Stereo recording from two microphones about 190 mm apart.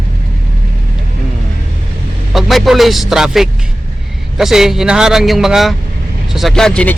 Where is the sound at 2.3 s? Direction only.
Centre (ahead or behind).